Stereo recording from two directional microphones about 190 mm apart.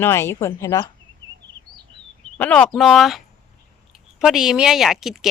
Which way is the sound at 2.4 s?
5° left (ahead or behind).